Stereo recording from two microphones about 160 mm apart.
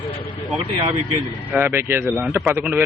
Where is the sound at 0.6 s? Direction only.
35° right (ahead or behind).